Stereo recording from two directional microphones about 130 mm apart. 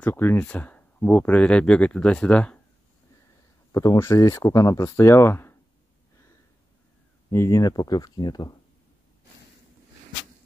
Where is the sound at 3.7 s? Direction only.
25° left (ahead or behind).